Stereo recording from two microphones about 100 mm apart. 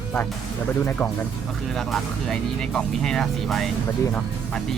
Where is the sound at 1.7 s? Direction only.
5° left (ahead or behind).